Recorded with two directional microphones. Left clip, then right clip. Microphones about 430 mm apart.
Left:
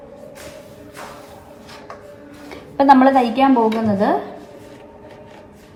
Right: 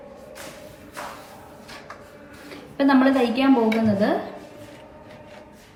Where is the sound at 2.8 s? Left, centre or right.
Centre.